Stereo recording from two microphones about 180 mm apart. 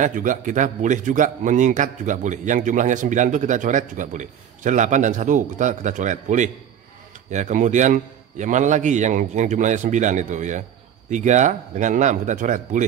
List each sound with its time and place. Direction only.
0.0 s a man's voice: 45° right (ahead or behind)